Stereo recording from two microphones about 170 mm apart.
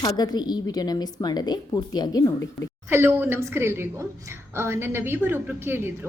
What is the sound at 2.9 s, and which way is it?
A woman's voice, 15° right (ahead or behind).